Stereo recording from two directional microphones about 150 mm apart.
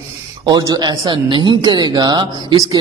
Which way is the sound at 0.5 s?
25° right (ahead or behind).